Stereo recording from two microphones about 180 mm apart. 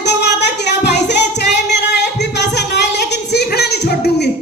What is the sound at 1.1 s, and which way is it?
Singing, 70° left (ahead or behind).